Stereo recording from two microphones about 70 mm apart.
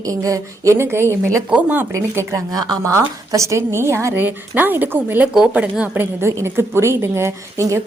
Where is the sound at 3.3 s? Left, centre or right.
Right.